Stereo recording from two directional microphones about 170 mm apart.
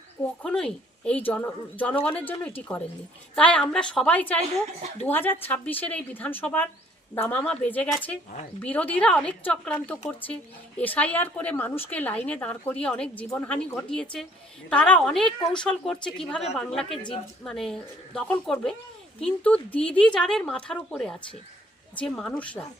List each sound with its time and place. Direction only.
0.4 s a woman's voice: 5° left (ahead or behind)